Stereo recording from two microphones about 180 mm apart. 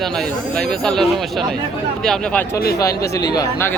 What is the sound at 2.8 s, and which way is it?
Speech, 20° left (ahead or behind).